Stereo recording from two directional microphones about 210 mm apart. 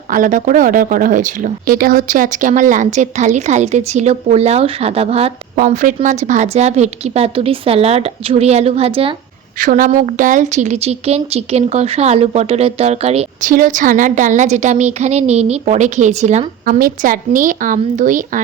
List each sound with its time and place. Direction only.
0.1 s speech: 40° right (ahead or behind)
5.5 s a woman's voice: 40° right (ahead or behind)
9.6 s speech: 40° right (ahead or behind)